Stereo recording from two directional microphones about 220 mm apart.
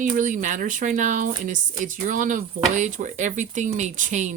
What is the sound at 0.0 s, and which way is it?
Speech, 35° right (ahead or behind).